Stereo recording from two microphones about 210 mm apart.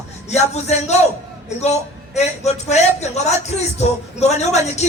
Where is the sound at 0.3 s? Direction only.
30° left (ahead or behind).